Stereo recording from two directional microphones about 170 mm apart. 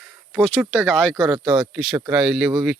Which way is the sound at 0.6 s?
5° left (ahead or behind).